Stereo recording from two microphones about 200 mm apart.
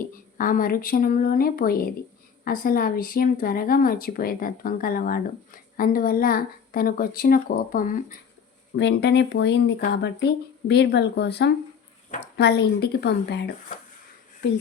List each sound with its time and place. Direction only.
0.3 s speech: 45° left (ahead or behind)
8.7 s speech: 60° left (ahead or behind)